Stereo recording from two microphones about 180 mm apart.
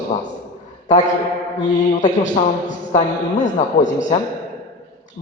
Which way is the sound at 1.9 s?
40° left (ahead or behind).